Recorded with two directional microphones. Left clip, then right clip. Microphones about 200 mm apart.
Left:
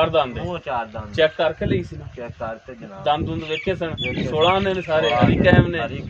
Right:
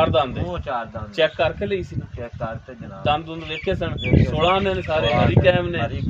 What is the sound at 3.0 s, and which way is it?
Speech, 10° left (ahead or behind).